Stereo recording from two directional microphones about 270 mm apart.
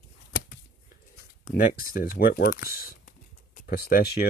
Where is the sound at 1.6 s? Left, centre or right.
Left.